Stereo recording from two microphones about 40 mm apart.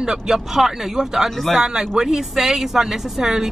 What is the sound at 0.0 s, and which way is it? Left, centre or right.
A woman's voice, centre.